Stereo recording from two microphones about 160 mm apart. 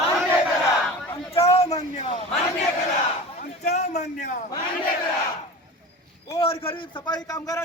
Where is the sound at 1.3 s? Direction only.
40° left (ahead or behind).